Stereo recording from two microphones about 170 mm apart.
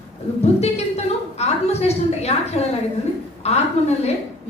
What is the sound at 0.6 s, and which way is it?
A woman's voice, 40° left (ahead or behind).